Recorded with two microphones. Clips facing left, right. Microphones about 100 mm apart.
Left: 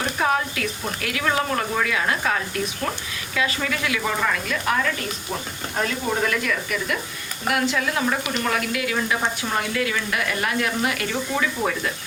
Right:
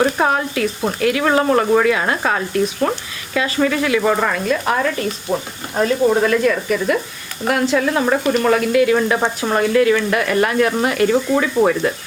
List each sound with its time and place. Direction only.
0.0 s speech: 40° right (ahead or behind)